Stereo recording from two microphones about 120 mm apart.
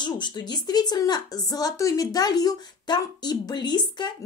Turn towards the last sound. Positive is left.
turn(degrees=35)  # may be behind; listen again after turning